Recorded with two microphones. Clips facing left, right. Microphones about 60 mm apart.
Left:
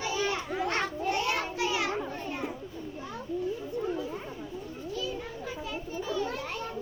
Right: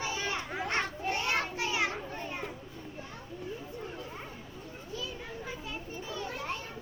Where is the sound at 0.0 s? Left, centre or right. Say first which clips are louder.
Left 4 dB; right.